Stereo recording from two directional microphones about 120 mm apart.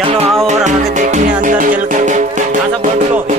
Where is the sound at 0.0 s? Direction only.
55° right (ahead or behind).